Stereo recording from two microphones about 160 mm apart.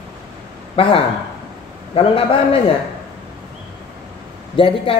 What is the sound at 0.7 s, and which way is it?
A man's voice, 35° left (ahead or behind).